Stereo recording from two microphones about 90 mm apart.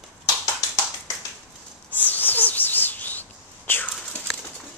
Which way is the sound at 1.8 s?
20° left (ahead or behind).